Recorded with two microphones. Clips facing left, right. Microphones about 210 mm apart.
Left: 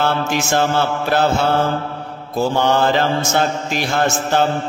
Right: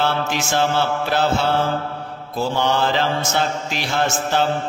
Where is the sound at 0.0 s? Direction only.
50° left (ahead or behind).